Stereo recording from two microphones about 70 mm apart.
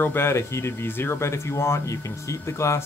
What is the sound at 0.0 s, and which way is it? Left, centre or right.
Speech, left.